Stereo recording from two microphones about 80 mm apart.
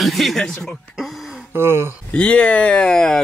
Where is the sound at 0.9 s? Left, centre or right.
Centre.